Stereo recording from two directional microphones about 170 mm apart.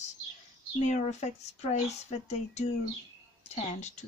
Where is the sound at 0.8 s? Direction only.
40° left (ahead or behind).